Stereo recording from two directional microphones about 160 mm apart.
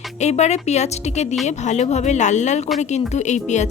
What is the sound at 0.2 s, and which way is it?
Speech, 45° left (ahead or behind).